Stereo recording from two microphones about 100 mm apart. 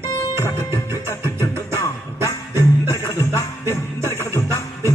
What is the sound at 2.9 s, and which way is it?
Music, 30° left (ahead or behind).